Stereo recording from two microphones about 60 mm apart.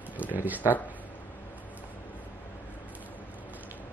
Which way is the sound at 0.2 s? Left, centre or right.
Right.